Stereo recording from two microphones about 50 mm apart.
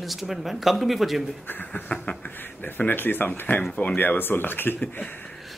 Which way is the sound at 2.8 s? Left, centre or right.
Left.